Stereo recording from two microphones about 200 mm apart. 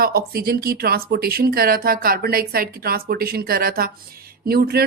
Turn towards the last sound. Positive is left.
turn(degrees=-50)  # may be behind; listen again after turning